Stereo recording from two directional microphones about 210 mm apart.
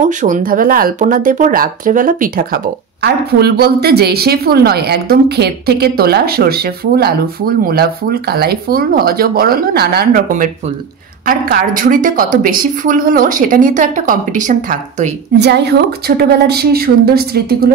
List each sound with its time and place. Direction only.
0.0 s a woman's voice: 40° right (ahead or behind)
15.3 s speech: 50° right (ahead or behind)